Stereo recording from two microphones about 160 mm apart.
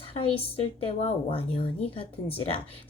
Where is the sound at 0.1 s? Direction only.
35° left (ahead or behind).